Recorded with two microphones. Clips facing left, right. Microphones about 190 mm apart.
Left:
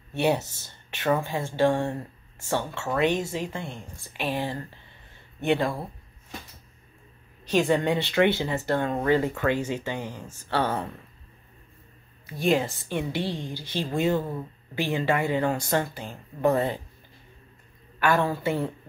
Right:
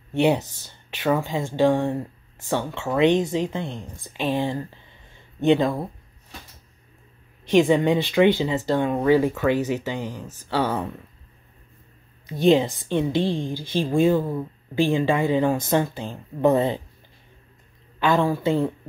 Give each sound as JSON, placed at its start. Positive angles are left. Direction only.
{"t": 0.1, "sound": "speech", "side_deg": -15}
{"t": 7.5, "sound": "speech", "side_deg": -15}
{"t": 12.3, "sound": "speech", "side_deg": -20}
{"t": 17.9, "sound": "speech", "side_deg": -20}